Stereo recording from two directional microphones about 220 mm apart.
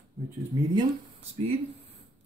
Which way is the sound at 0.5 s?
15° right (ahead or behind).